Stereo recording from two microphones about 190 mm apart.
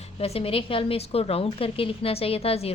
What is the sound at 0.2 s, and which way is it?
A woman's voice, 30° left (ahead or behind).